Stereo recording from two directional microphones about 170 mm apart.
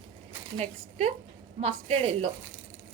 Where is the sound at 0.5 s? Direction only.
40° right (ahead or behind).